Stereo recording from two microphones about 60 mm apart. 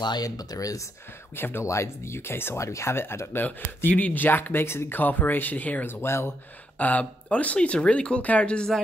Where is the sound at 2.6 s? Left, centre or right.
Left.